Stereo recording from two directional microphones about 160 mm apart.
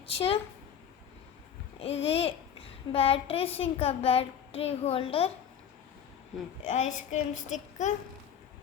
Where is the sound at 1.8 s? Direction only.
40° left (ahead or behind).